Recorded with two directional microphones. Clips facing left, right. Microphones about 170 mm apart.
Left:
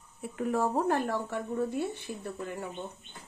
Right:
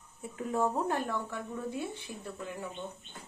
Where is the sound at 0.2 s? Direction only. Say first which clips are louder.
Left 2 dB; 75° left (ahead or behind).